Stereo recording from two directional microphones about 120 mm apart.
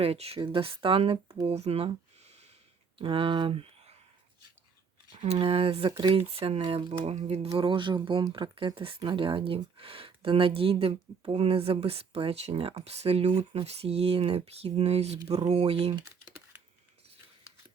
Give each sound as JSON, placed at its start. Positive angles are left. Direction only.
{"t": 0.0, "sound": "speech", "side_deg": -55}
{"t": 0.3, "sound": "speech", "side_deg": -40}
{"t": 1.5, "sound": "a sound", "side_deg": -60}
{"t": 3.0, "sound": "speech", "side_deg": -45}
{"t": 5.2, "sound": "speech", "side_deg": -55}
{"t": 6.0, "sound": "speech", "side_deg": -40}
{"t": 6.2, "sound": "speech", "side_deg": -55}
{"t": 6.6, "sound": "speech", "side_deg": -45}
{"t": 7.5, "sound": "speech", "side_deg": -40}